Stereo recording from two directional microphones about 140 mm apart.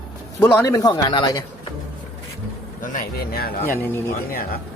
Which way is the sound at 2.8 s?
70° left (ahead or behind).